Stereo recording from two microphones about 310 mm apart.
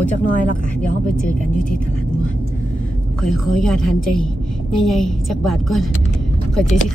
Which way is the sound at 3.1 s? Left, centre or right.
Centre.